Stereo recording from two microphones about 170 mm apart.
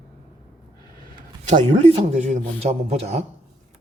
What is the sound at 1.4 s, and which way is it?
A man's voice, 35° right (ahead or behind).